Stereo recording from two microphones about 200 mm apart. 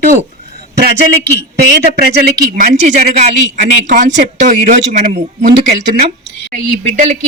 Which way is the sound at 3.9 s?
40° right (ahead or behind).